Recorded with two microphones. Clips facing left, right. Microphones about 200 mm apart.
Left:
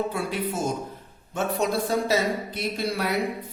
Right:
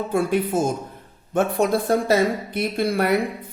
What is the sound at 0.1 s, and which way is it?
A man's voice, 50° right (ahead or behind).